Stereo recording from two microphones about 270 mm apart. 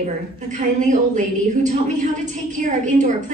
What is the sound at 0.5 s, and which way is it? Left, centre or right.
A woman's voice, right.